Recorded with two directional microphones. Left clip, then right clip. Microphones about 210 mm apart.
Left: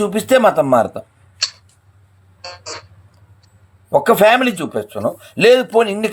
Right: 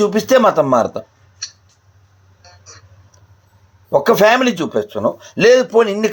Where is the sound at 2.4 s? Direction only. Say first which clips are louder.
Left 12 dB; 45° left (ahead or behind).